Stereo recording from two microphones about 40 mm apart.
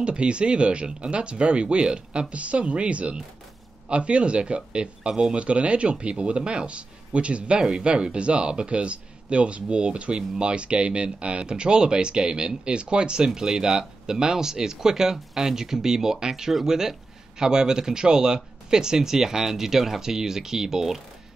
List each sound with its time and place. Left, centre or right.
0.0 s speech: right